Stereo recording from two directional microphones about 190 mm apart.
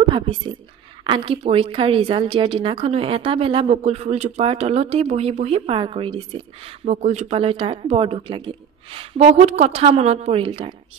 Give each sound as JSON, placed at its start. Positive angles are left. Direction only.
{"t": 1.0, "sound": "a woman's voice", "side_deg": -25}